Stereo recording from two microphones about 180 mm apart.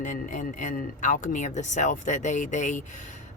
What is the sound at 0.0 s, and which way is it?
Speech, 45° left (ahead or behind).